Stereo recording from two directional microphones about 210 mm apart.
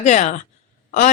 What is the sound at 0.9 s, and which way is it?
Hiccup, 35° left (ahead or behind).